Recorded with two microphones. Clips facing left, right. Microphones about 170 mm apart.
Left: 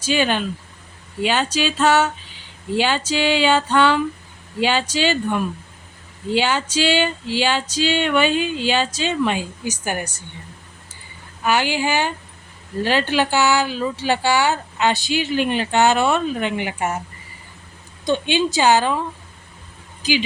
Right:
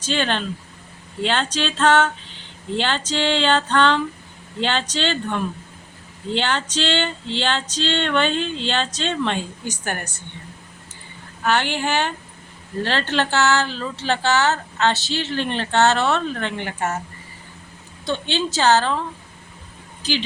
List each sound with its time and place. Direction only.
0.0 s speech: 10° left (ahead or behind)
11.4 s speech: 10° left (ahead or behind)
18.0 s speech: 15° left (ahead or behind)